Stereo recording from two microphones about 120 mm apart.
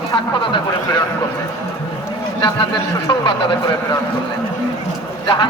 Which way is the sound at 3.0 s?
40° left (ahead or behind).